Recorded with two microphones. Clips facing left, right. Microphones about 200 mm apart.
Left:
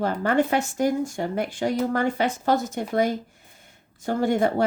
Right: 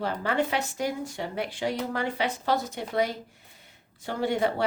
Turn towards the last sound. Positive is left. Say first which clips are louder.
# left 5 dB
turn(degrees=45)  # may be behind; listen again after turning